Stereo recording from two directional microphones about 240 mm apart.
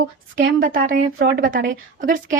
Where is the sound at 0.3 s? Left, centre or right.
Right.